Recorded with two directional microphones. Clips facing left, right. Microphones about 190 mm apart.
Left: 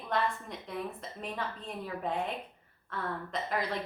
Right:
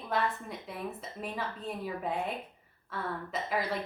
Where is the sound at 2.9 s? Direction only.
5° right (ahead or behind).